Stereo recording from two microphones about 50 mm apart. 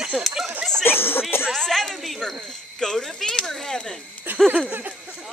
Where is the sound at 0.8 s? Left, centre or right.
Left.